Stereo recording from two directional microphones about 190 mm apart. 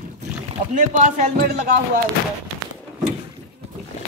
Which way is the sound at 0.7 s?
40° right (ahead or behind).